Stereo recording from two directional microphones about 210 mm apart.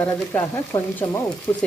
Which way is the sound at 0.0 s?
10° left (ahead or behind).